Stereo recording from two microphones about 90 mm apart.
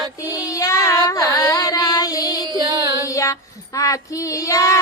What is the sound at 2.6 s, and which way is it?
Child singing, 40° right (ahead or behind).